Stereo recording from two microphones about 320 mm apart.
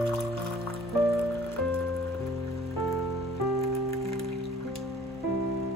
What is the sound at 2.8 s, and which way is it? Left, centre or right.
Rain on surface, centre.